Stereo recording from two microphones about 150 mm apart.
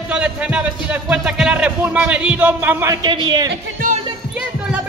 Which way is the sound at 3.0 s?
30° right (ahead or behind).